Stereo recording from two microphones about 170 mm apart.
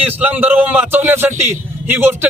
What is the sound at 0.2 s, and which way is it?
Speech, 10° right (ahead or behind).